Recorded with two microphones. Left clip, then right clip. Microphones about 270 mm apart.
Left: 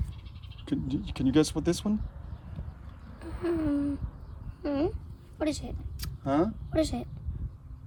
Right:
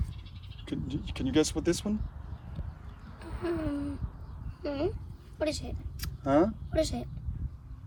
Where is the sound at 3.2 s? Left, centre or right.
Left.